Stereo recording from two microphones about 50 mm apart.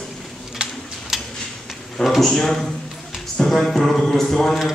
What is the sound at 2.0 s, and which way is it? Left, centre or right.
A man's voice, centre.